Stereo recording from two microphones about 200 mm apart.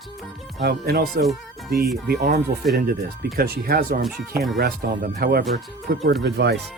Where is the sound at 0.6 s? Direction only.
50° right (ahead or behind).